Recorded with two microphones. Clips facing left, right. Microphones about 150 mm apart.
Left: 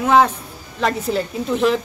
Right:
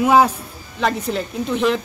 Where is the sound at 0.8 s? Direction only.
Centre (ahead or behind).